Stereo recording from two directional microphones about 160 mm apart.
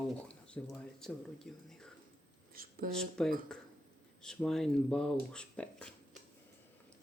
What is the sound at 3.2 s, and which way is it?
Speech, 5° left (ahead or behind).